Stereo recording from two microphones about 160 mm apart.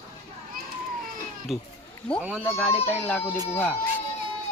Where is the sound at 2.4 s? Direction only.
15° left (ahead or behind).